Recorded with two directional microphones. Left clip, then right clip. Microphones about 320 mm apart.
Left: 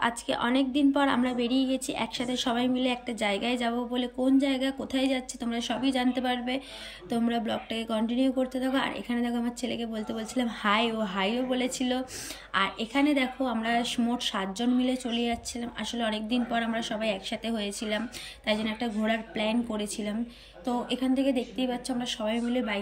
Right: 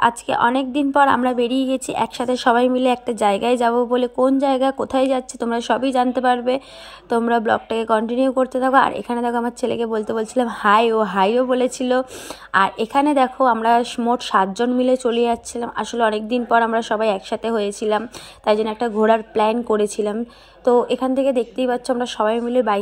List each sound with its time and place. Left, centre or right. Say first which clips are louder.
0.0 s a woman's voice: right 12 dB; centre